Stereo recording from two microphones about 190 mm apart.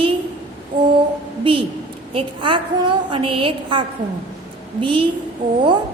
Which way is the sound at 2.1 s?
25° right (ahead or behind).